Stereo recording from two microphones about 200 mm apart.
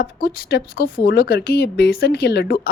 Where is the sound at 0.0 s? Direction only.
50° left (ahead or behind).